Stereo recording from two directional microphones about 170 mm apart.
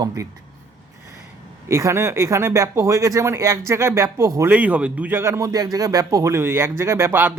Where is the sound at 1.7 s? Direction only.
15° right (ahead or behind).